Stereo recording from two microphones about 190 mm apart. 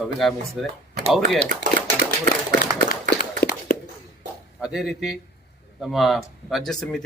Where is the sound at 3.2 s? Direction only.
50° left (ahead or behind).